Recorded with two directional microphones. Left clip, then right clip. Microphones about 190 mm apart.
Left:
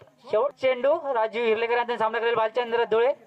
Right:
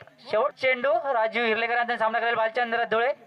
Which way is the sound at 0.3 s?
30° right (ahead or behind).